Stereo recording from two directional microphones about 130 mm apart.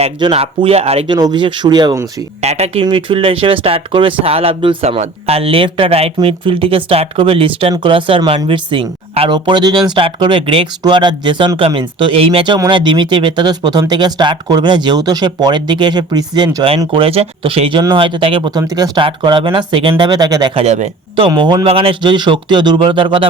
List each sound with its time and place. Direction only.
0.3 s speech: 50° right (ahead or behind)
1.0 s speech: 35° right (ahead or behind)
2.4 s speech: 55° right (ahead or behind)
2.8 s speech: 40° right (ahead or behind)
12.5 s speech: 35° right (ahead or behind)
16.8 s speech: 40° right (ahead or behind)
18.7 s speech: 30° right (ahead or behind)
19.0 s speech: 40° right (ahead or behind)
20.1 s speech: 30° right (ahead or behind)
20.6 s speech: 60° right (ahead or behind)
21.2 s speech: 40° right (ahead or behind)